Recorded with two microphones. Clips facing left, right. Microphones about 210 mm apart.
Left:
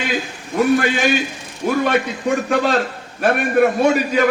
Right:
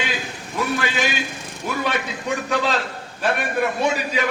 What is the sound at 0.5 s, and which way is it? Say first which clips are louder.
A man's voice: left 8 dB; 50° left (ahead or behind).